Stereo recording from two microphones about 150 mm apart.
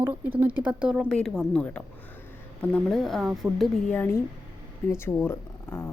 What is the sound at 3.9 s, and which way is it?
A woman's voice, 10° left (ahead or behind).